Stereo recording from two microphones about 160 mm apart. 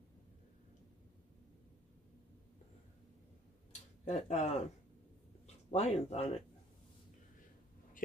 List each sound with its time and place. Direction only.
4.0 s speech: 45° left (ahead or behind)
5.7 s speech: 45° left (ahead or behind)